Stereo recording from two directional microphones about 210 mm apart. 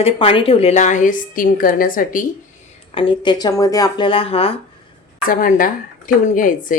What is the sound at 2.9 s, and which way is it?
Speech, 25° left (ahead or behind).